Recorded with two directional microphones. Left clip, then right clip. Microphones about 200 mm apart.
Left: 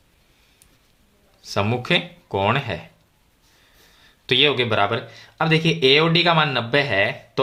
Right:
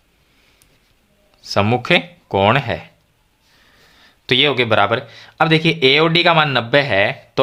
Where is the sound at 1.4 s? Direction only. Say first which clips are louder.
Right 6 dB; 30° right (ahead or behind).